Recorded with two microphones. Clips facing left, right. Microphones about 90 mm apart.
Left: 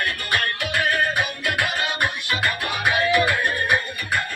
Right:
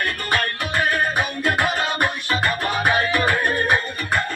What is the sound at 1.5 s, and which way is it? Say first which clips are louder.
Music: right 6 dB; 35° right (ahead or behind).